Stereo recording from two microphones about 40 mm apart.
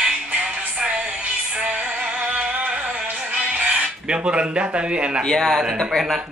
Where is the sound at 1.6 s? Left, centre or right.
Right.